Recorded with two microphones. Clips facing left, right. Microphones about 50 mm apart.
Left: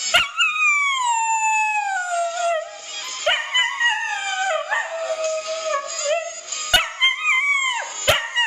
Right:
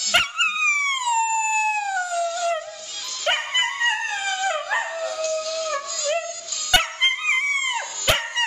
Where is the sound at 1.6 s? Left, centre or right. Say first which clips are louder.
Left 2 dB; left.